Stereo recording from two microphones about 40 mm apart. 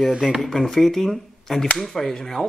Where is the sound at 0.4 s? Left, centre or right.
Centre.